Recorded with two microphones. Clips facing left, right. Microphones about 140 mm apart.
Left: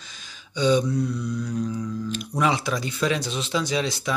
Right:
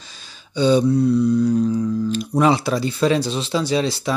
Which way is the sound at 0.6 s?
35° right (ahead or behind).